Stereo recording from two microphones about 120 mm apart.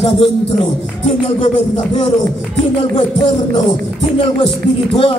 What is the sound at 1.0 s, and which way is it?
Music, 70° left (ahead or behind).